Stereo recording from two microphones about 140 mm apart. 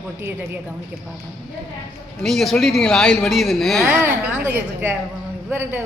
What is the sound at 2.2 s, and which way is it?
Speech, centre (ahead or behind).